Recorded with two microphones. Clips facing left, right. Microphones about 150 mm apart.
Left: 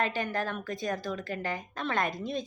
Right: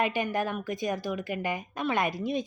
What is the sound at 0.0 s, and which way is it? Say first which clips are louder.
Speech: right 3 dB; 15° right (ahead or behind).